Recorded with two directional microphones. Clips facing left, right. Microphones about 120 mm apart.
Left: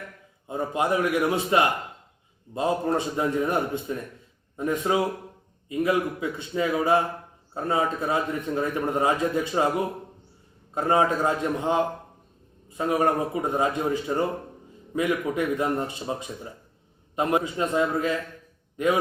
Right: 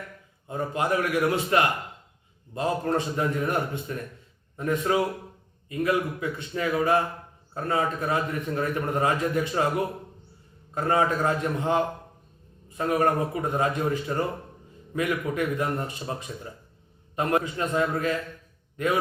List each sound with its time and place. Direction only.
0.4 s a man's voice: 20° left (ahead or behind)